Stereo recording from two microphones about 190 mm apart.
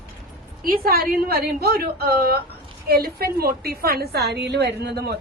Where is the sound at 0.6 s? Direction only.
50° right (ahead or behind).